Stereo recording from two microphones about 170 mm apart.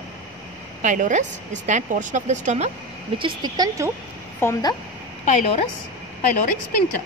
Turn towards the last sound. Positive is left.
turn(degrees=55)  # may be behind; listen again after turning